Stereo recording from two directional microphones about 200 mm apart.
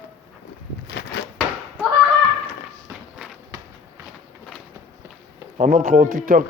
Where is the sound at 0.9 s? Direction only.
55° left (ahead or behind).